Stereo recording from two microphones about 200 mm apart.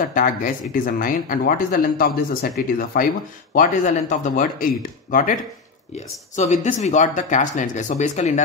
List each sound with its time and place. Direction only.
0.0 s speech: 45° left (ahead or behind)